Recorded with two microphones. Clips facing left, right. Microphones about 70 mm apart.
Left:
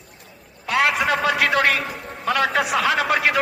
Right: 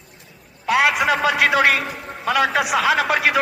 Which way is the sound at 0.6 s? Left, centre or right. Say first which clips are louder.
Right 2 dB; centre.